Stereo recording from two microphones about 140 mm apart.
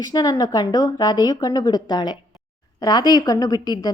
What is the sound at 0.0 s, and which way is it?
A woman's voice, 30° left (ahead or behind).